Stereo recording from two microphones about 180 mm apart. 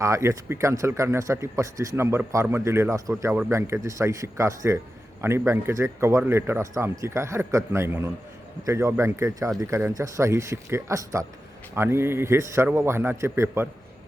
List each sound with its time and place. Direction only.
0.0 s speech: 15° right (ahead or behind)